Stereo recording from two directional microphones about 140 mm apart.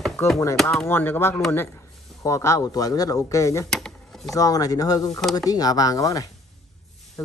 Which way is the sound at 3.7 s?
5° left (ahead or behind).